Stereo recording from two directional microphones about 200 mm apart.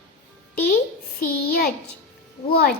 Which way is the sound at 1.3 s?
50° left (ahead or behind).